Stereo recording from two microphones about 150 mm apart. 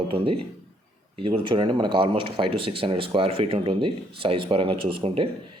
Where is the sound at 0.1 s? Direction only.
35° right (ahead or behind).